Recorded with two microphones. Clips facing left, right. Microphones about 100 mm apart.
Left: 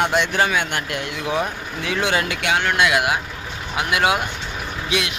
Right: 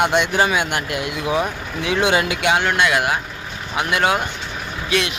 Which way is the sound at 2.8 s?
5° left (ahead or behind).